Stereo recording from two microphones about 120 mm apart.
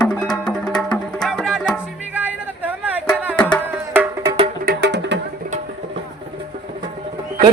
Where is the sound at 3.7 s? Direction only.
15° right (ahead or behind).